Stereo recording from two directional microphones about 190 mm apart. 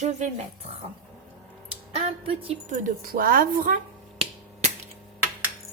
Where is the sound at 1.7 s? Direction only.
30° right (ahead or behind).